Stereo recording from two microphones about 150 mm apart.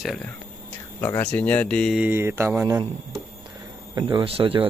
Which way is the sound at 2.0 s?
15° right (ahead or behind).